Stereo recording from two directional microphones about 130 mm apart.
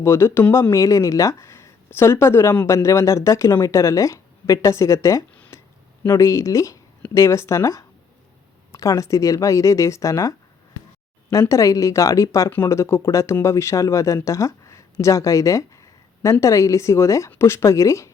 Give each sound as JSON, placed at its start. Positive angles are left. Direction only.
{"t": 0.0, "sound": "speech", "side_deg": 20}
{"t": 5.3, "sound": "a sound", "side_deg": 10}
{"t": 6.0, "sound": "speech", "side_deg": 20}